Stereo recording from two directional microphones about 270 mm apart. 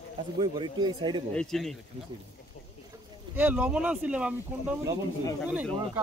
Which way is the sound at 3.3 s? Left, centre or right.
Centre.